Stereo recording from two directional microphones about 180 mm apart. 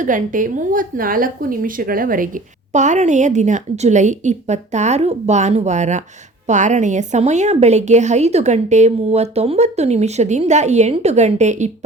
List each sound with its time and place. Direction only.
0.0 s a woman's voice: 45° right (ahead or behind)